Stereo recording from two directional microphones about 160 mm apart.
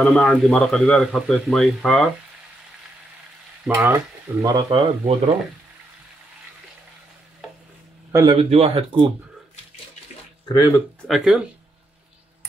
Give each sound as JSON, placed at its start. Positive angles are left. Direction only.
{"t": 0.0, "sound": "speech", "side_deg": 0}
{"t": 3.6, "sound": "speech", "side_deg": -15}
{"t": 4.6, "sound": "speech", "side_deg": -35}
{"t": 8.1, "sound": "speech", "side_deg": -20}
{"t": 8.4, "sound": "speech", "side_deg": -40}
{"t": 10.5, "sound": "speech", "side_deg": 25}
{"t": 11.1, "sound": "speech", "side_deg": 0}